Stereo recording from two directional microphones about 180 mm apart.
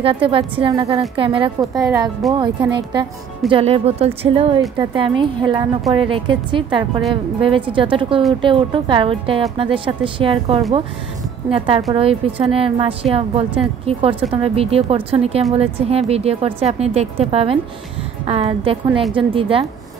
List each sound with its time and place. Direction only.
0.0 s speech: 30° right (ahead or behind)
1.6 s speech: 20° right (ahead or behind)
2.2 s speech: centre (ahead or behind)
2.9 s a woman's voice: 25° right (ahead or behind)